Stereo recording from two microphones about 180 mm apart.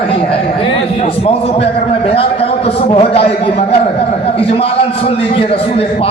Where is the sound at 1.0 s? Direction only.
35° left (ahead or behind).